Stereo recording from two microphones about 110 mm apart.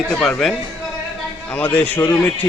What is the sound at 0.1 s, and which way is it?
A man's voice, 5° left (ahead or behind).